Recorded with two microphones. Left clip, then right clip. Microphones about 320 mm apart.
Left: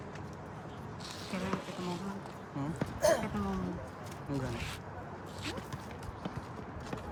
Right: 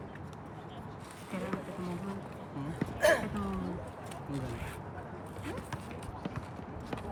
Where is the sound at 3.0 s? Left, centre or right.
Right.